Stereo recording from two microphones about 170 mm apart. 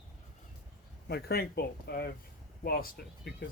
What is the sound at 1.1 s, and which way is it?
Speech, 65° left (ahead or behind).